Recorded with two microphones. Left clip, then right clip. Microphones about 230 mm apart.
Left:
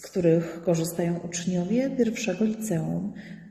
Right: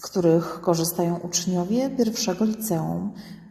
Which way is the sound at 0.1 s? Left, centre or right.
Right.